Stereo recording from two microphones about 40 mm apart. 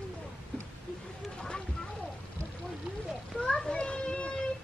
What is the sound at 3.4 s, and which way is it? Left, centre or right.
Children playing, left.